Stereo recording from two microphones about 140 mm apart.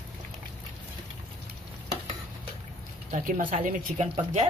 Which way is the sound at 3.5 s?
60° right (ahead or behind).